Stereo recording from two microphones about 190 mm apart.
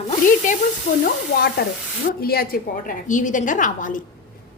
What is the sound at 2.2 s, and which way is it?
Speech, 50° left (ahead or behind).